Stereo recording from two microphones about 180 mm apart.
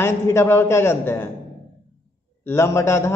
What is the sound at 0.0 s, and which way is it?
A man's voice, 15° left (ahead or behind).